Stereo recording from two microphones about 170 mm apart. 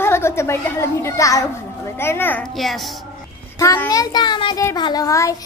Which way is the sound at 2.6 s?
Centre (ahead or behind).